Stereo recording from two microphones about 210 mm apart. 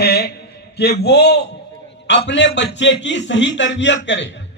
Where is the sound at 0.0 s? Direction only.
50° left (ahead or behind).